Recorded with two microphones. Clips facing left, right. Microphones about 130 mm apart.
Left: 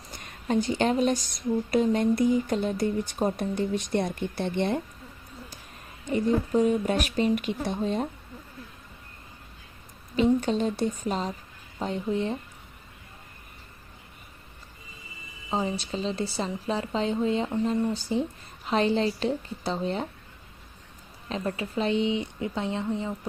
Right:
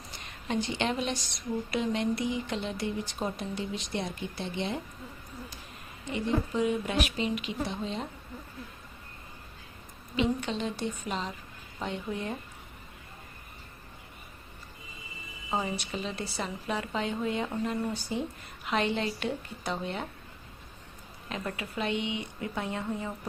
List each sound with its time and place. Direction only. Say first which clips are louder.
0.2 s a woman's voice: left 6 dB; 45° left (ahead or behind)
6.1 s a woman's voice: left 5 dB; 45° left (ahead or behind)
10.2 s a woman's voice: left 6 dB; 40° left (ahead or behind)
15.4 s a woman's voice: left 3 dB; 25° left (ahead or behind)
21.2 s a woman's voice: left 5 dB; 30° left (ahead or behind)